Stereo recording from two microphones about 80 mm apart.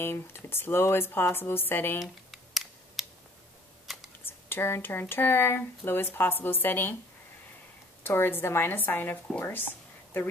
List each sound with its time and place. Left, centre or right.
0.0 s speech: left
2.0 s computer keyboard: centre
3.8 s a sound: centre
4.2 s speech: left
8.0 s speech: left